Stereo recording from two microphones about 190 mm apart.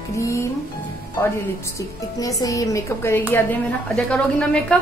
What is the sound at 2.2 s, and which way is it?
A woman's voice, 20° left (ahead or behind).